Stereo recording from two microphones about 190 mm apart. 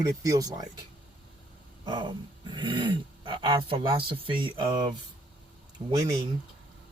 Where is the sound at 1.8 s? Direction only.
25° right (ahead or behind).